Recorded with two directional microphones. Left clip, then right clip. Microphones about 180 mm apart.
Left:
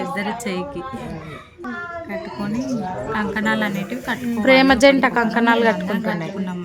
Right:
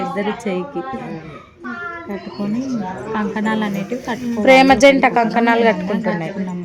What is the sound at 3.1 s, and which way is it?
Speech, 15° right (ahead or behind).